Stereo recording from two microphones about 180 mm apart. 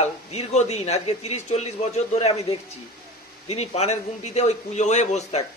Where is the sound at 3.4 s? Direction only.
35° left (ahead or behind).